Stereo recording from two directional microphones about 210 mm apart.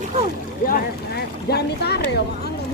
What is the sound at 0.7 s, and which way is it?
Boat, 45° left (ahead or behind).